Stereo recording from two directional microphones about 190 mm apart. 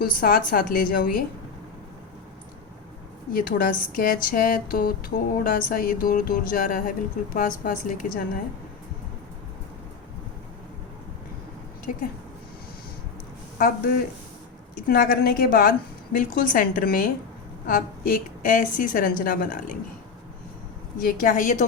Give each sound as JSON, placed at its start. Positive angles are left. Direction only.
{"t": 0.0, "sound": "speech", "side_deg": 50}
{"t": 3.3, "sound": "speech", "side_deg": 45}
{"t": 11.9, "sound": "speech", "side_deg": 45}
{"t": 13.6, "sound": "speech", "side_deg": 50}
{"t": 21.0, "sound": "speech", "side_deg": 50}